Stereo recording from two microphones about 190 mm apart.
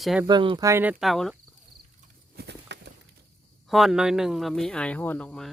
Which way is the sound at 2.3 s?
60° right (ahead or behind).